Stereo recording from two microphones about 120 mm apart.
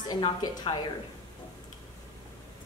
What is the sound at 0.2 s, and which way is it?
Speech, 45° left (ahead or behind).